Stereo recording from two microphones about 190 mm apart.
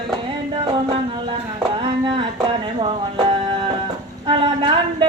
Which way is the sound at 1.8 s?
25° right (ahead or behind).